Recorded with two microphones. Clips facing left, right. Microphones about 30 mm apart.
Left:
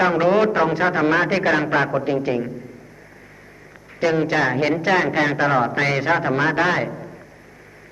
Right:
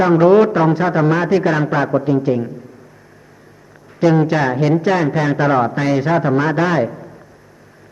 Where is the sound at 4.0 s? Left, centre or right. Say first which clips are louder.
Right 4 dB; centre.